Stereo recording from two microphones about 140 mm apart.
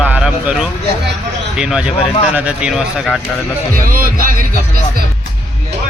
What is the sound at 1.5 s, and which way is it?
Speech, 5° right (ahead or behind).